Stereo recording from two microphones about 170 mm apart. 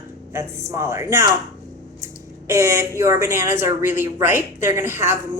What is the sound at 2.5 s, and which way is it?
Speech, 15° right (ahead or behind).